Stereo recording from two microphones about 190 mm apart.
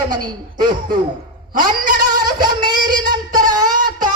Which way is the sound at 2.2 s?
25° right (ahead or behind).